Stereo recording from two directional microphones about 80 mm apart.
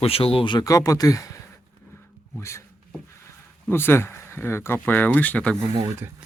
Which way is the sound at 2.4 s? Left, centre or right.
Left.